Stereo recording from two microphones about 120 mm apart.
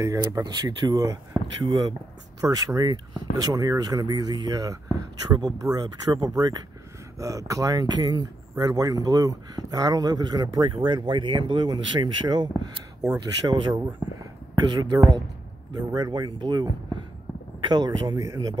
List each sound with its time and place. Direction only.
0.0 s speech: 30° right (ahead or behind)
14.0 s a sound: 15° right (ahead or behind)
14.5 s speech: 40° right (ahead or behind)